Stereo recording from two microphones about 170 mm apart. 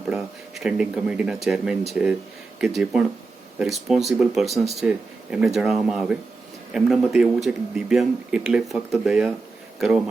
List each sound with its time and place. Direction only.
0.1 s speech: 5° right (ahead or behind)